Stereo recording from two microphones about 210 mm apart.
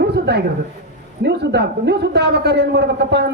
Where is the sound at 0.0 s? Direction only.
50° right (ahead or behind).